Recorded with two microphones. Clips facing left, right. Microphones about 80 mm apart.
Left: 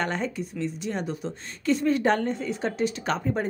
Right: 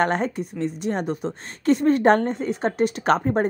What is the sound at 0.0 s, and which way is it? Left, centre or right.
A woman's voice, right.